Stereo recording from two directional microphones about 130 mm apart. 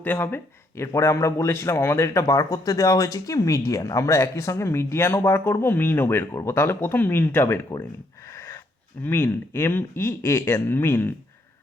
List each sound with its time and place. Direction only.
0.0 s speech: 15° left (ahead or behind)
8.3 s a sound: 20° left (ahead or behind)
9.0 s speech: 15° left (ahead or behind)